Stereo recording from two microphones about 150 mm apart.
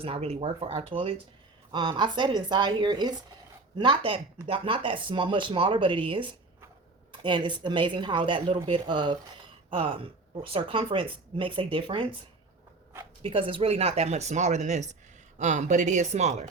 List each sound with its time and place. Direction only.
0.0 s speech: 40° right (ahead or behind)
13.2 s speech: 35° right (ahead or behind)